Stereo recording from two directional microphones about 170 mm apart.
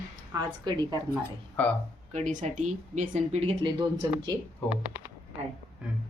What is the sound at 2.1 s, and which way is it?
Speech, 45° right (ahead or behind).